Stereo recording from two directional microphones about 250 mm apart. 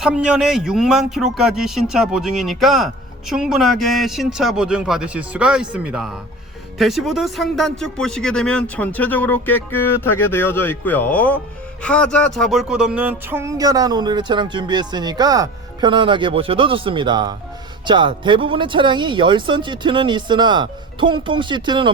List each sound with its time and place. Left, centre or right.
0.0 s speech: centre
11.8 s a sound: centre
17.8 s speech: centre